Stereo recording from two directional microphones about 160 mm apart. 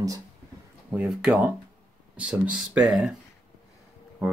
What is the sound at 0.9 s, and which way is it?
Speech, 10° right (ahead or behind).